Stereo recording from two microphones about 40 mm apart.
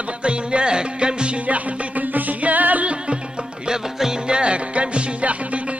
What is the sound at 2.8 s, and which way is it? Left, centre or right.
Music, right.